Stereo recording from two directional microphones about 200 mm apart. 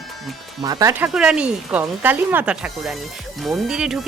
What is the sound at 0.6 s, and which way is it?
Speech, 20° right (ahead or behind).